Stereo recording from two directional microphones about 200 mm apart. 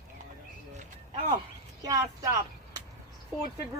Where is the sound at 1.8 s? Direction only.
15° right (ahead or behind).